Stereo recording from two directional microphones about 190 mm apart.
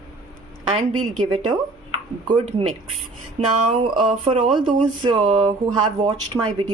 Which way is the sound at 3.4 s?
35° right (ahead or behind).